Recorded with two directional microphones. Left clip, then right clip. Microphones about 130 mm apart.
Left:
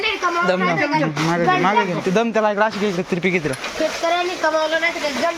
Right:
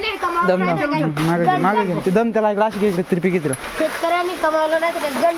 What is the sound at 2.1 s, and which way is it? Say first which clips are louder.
Speech: even; 40° right (ahead or behind).